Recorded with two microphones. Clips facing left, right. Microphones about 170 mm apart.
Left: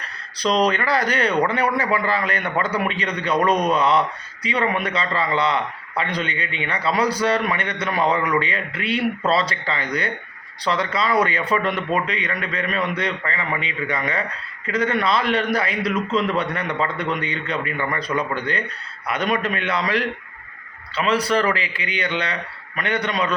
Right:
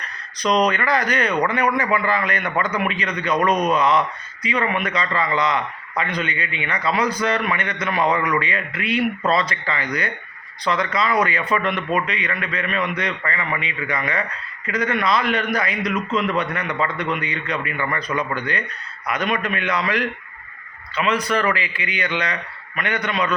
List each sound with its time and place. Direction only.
0.3 s a man's voice: 30° left (ahead or behind)